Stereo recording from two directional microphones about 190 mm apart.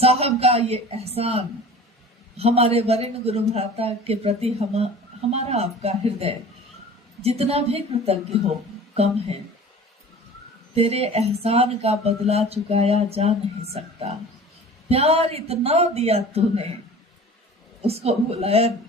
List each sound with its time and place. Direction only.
0.0 s speech: 30° right (ahead or behind)
10.8 s speech: 35° right (ahead or behind)
14.8 s speech: 35° right (ahead or behind)
17.8 s speech: 35° right (ahead or behind)